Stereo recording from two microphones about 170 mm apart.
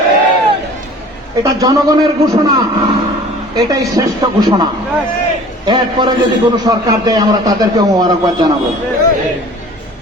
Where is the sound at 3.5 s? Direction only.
20° right (ahead or behind).